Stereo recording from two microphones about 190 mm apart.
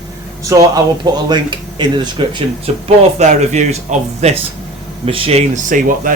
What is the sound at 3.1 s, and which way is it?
Speech, 40° right (ahead or behind).